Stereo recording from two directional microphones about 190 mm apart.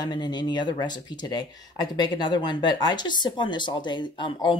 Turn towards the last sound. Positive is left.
turn(degrees=25)  # may be behind; listen again after turning